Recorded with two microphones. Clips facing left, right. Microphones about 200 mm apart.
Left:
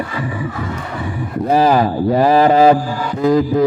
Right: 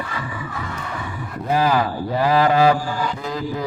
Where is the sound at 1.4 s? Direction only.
35° left (ahead or behind).